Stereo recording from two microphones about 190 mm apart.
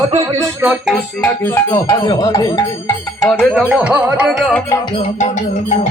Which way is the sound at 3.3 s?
Centre (ahead or behind).